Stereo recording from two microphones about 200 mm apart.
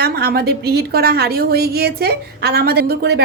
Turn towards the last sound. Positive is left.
turn(degrees=-55)  # may be behind; listen again after turning